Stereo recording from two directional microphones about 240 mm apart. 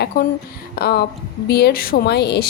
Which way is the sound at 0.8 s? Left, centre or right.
Left.